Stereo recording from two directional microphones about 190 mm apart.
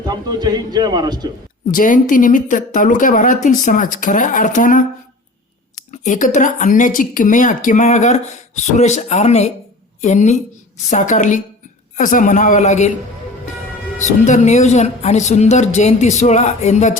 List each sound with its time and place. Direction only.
0.0 s speech: 20° right (ahead or behind)
1.7 s speech: 45° left (ahead or behind)
6.0 s a woman's voice: 40° left (ahead or behind)
14.0 s a woman's voice: 40° left (ahead or behind)